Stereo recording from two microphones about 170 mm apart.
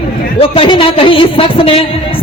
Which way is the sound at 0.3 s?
30° left (ahead or behind).